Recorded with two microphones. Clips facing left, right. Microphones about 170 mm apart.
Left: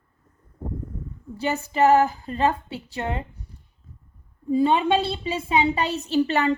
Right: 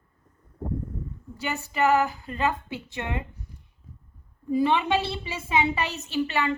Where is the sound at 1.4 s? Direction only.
35° left (ahead or behind).